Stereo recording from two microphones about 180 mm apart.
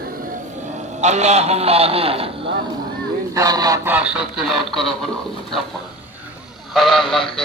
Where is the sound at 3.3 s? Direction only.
20° right (ahead or behind).